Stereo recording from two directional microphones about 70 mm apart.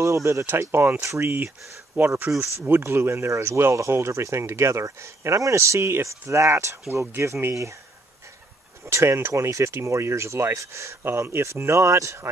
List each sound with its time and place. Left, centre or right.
0.0 s speech: right
1.0 s speech: right
2.0 s speech: right
8.8 s speech: right